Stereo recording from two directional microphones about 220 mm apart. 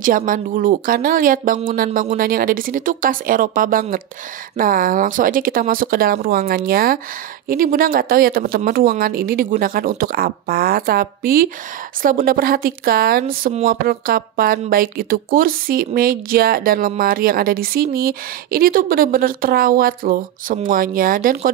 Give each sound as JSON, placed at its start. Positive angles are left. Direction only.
{"t": 0.0, "sound": "a woman's voice", "side_deg": -40}